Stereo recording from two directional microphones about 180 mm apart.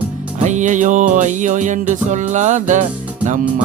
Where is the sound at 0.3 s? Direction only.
40° right (ahead or behind).